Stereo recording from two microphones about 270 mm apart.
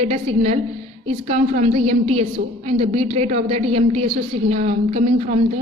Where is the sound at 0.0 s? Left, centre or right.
Right.